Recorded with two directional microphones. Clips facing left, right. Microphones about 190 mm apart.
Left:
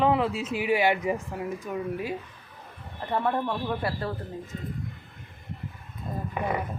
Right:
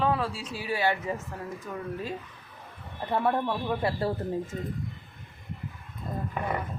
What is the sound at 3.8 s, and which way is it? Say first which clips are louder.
Speech: right 3 dB; 25° right (ahead or behind).